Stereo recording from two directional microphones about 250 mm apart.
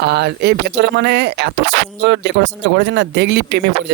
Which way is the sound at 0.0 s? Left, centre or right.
Right.